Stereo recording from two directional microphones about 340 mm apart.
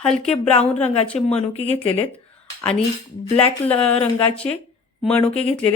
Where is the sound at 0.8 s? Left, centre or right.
Centre.